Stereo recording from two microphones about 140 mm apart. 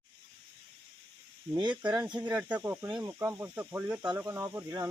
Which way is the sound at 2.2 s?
10° right (ahead or behind).